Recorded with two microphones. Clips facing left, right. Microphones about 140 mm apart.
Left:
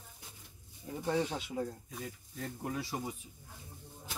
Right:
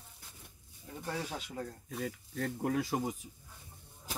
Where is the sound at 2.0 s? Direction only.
65° right (ahead or behind); by 3.1 s 50° right (ahead or behind).